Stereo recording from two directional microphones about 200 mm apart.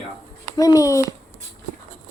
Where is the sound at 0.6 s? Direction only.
15° left (ahead or behind).